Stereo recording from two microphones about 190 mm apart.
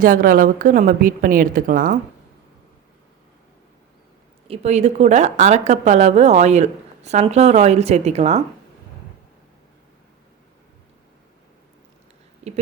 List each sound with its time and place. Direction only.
0.0 s a woman's voice: 45° right (ahead or behind)
4.4 s a woman's voice: 30° right (ahead or behind)